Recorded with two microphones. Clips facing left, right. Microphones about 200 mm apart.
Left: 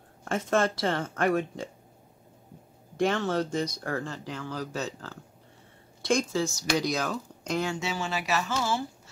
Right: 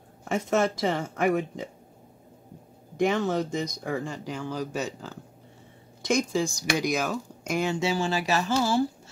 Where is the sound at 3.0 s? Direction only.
10° right (ahead or behind).